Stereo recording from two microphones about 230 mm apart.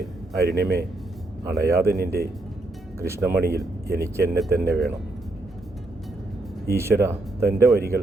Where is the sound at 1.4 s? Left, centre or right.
Centre.